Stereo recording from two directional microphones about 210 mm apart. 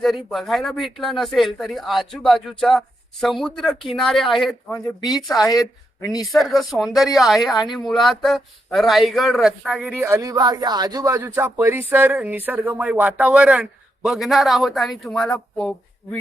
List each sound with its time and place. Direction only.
0.0 s speech: centre (ahead or behind)
4.7 s speech: 20° left (ahead or behind)
6.3 s speech: centre (ahead or behind)